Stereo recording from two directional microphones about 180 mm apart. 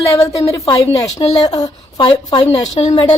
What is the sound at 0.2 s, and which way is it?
A woman's voice, 20° left (ahead or behind).